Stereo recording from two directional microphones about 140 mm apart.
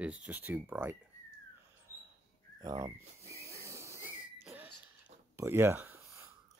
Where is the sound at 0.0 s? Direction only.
10° right (ahead or behind).